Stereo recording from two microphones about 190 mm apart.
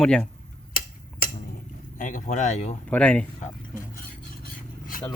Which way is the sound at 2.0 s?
45° left (ahead or behind).